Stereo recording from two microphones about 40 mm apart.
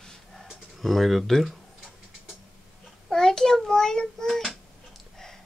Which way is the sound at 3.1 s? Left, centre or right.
Centre.